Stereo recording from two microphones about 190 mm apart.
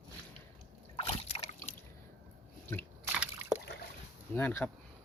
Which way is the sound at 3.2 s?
5° right (ahead or behind).